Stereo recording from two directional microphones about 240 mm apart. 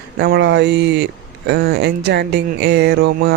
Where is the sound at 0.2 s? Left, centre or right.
Right.